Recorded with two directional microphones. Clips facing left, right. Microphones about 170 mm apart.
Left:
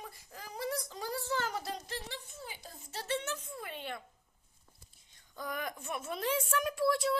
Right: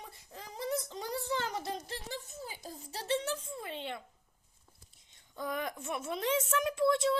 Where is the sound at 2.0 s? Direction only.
40° right (ahead or behind); by 4.0 s 25° right (ahead or behind).